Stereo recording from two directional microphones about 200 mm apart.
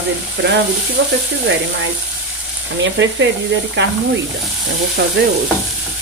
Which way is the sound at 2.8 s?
65° right (ahead or behind).